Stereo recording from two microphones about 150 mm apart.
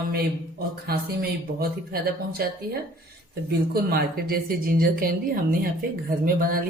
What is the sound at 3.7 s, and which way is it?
Speech, 90° right.